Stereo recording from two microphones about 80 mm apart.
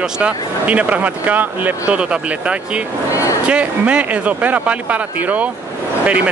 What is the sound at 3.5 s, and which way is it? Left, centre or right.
Speech, centre.